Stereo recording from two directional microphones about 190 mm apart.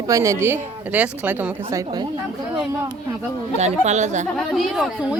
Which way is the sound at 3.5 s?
35° right (ahead or behind).